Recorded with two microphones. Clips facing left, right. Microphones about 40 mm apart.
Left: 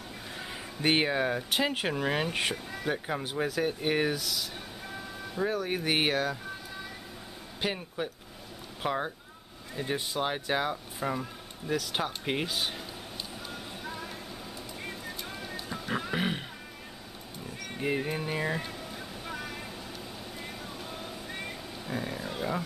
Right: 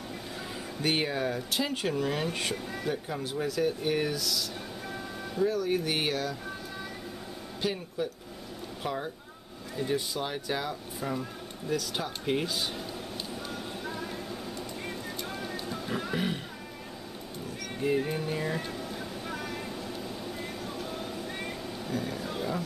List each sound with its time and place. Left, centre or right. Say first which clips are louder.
0.8 s speech: left 3 dB; left
2.5 s speech: right 2 dB; centre
2.9 s speech: left 2 dB; left
4.8 s music: right 1 dB; centre
5.4 s speech: right 3 dB; left
7.6 s speech: right 1 dB; left
13.5 s a sound: right 3 dB; centre
14.9 s music: right 2 dB; centre
16.1 s music: even; left
17.7 s speech: right 2 dB; centre
18.6 s music: right 3 dB; centre
21.9 s roaring cats: right 1 dB; centre